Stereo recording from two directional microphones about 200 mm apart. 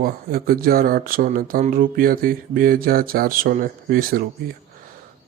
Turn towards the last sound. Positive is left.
turn(degrees=-45)  # may be behind; listen again after turning